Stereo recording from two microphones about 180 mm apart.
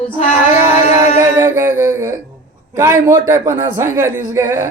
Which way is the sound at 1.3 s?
15° right (ahead or behind).